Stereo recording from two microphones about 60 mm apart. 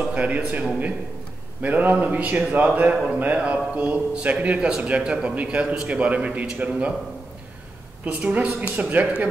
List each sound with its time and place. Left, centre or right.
0.1 s a man's voice: right
8.0 s a man's voice: right